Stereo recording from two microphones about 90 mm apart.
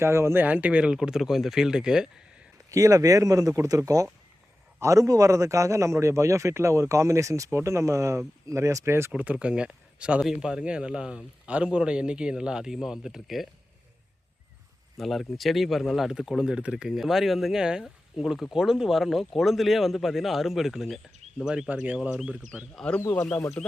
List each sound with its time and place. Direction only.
0.0 s a man's voice: 30° right (ahead or behind)
0.4 s speech: 15° right (ahead or behind)
2.6 s a man's voice: 35° right (ahead or behind)
9.1 s speech: 15° right (ahead or behind)
14.9 s speech: centre (ahead or behind)
21.7 s speech: 20° right (ahead or behind)
22.7 s speech: 5° left (ahead or behind)
23.0 s speech: 25° left (ahead or behind)